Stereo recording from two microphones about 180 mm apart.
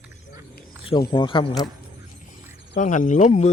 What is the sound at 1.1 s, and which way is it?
Speech, 25° left (ahead or behind).